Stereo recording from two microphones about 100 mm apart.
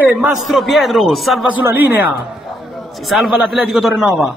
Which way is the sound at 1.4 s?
15° right (ahead or behind).